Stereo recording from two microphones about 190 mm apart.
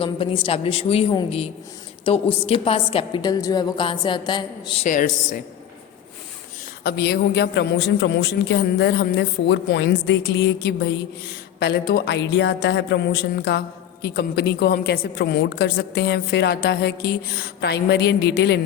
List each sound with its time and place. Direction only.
0.0 s a woman's voice: 25° left (ahead or behind)
4.9 s a woman's voice: 40° left (ahead or behind)
6.8 s a woman's voice: 55° left (ahead or behind)